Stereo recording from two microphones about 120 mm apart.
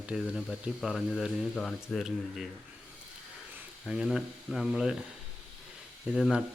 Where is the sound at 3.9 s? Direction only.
5° right (ahead or behind).